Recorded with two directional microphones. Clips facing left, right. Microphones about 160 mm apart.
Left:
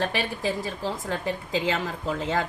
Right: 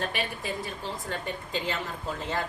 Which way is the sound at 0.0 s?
90° left.